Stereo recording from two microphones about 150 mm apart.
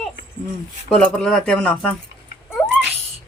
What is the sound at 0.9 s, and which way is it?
Speech, 5° left (ahead or behind).